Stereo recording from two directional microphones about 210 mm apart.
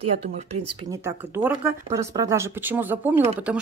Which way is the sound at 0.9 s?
10° right (ahead or behind).